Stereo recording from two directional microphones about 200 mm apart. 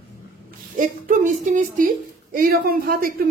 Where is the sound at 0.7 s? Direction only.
40° right (ahead or behind).